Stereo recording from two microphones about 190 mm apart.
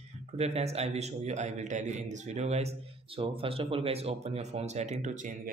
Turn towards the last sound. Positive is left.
turn(degrees=-40)  # may be behind; listen again after turning